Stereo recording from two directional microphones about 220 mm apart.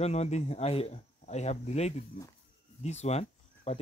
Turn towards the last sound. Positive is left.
turn(degrees=30)  # may be behind; listen again after turning